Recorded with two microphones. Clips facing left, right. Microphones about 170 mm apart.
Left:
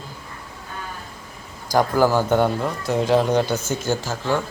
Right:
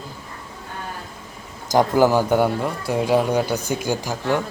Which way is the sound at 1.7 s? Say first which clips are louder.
Right 2 dB; 20° right (ahead or behind).